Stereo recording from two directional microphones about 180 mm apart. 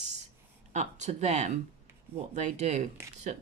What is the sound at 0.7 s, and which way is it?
A woman's voice, 40° right (ahead or behind).